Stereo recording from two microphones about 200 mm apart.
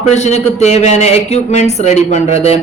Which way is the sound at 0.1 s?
35° left (ahead or behind).